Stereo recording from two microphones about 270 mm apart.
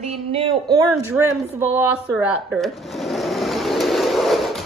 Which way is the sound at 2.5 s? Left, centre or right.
Centre.